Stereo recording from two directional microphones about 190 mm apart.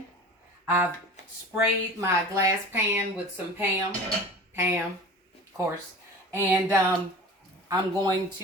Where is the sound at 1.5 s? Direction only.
15° right (ahead or behind).